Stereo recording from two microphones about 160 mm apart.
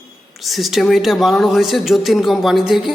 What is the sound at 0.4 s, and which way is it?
Speech, centre (ahead or behind).